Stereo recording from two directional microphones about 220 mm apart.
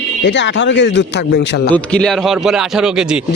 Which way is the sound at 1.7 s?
5° left (ahead or behind).